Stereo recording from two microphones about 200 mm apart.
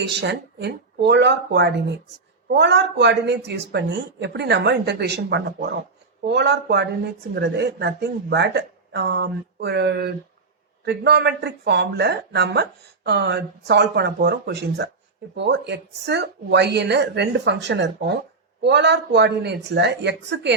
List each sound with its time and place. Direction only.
0.0 s speech: 60° right (ahead or behind)